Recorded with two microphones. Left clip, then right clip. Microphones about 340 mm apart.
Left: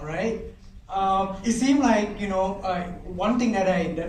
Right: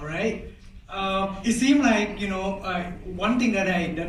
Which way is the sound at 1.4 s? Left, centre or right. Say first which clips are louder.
Right 1 dB; centre.